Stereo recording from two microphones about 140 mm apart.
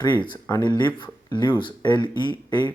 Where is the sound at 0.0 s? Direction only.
35° left (ahead or behind).